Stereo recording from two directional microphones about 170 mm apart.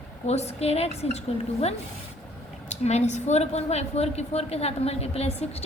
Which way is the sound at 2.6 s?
40° left (ahead or behind).